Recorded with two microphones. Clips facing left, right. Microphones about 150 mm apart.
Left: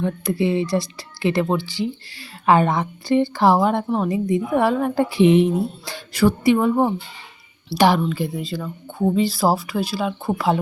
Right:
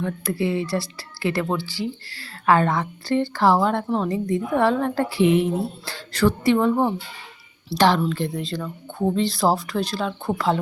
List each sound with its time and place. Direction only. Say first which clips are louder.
0.0 s speech: left 3 dB; 20° left (ahead or behind)